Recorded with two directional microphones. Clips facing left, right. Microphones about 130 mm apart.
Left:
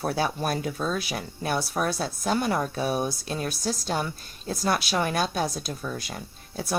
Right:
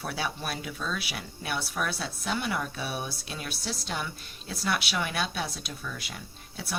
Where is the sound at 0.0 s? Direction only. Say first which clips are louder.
Left 7 dB; 40° left (ahead or behind).